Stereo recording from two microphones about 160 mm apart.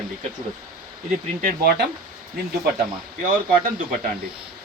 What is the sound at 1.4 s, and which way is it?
Speech, 70° right (ahead or behind).